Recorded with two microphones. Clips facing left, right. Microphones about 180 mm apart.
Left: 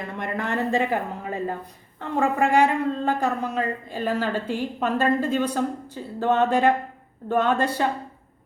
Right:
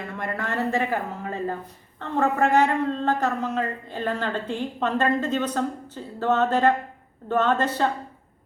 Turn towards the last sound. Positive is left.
turn(degrees=10)  # may be behind; listen again after turning